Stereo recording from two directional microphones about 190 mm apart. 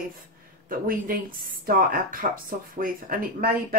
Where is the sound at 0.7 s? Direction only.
50° right (ahead or behind).